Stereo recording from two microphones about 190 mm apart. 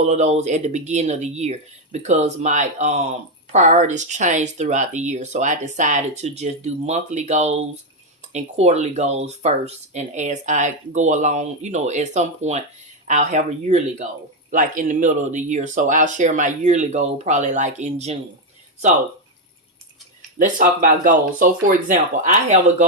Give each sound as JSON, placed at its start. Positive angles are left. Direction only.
{"t": 0.0, "sound": "speech", "side_deg": -35}
{"t": 20.4, "sound": "speech", "side_deg": -45}